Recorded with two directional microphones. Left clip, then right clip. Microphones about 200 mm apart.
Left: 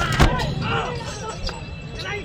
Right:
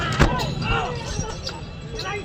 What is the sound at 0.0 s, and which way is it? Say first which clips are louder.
Basketball bounce: left 1 dB; centre (ahead or behind).